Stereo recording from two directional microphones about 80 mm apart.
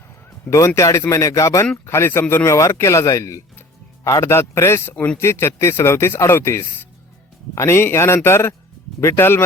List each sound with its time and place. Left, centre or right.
0.8 s speech: left